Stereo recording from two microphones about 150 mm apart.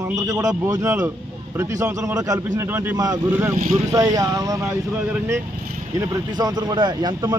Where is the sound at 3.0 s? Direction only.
25° right (ahead or behind).